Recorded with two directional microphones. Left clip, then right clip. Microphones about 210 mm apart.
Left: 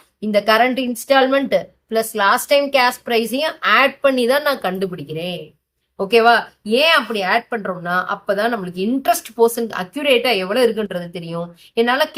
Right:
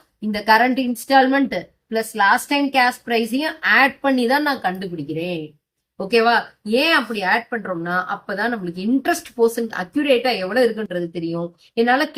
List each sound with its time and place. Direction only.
0.3 s a woman's voice: 35° left (ahead or behind)